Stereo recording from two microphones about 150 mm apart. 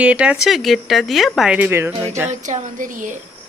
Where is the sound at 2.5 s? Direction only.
60° right (ahead or behind).